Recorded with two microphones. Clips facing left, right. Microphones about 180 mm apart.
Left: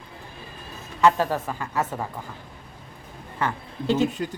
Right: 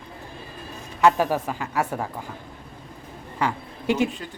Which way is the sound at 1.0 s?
15° right (ahead or behind).